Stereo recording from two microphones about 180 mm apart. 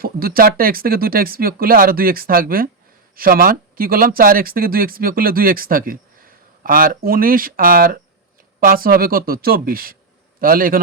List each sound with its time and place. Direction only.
0.0 s speech: 55° right (ahead or behind)